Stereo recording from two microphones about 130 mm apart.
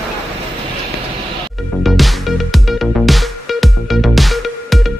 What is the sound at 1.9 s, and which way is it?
Music, centre (ahead or behind).